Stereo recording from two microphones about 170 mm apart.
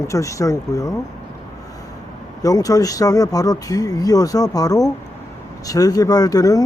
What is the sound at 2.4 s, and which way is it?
Speech, 20° left (ahead or behind).